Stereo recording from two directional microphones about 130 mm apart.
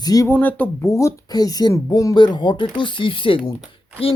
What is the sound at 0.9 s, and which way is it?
Speech, 25° left (ahead or behind).